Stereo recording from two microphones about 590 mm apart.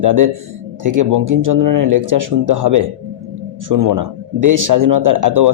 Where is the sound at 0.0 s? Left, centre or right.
Right.